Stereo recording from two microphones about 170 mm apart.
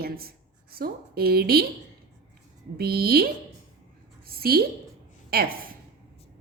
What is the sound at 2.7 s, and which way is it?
Speech, 65° right (ahead or behind).